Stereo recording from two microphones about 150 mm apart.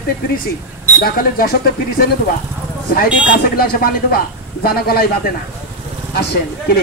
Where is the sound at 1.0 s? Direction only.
75° left (ahead or behind).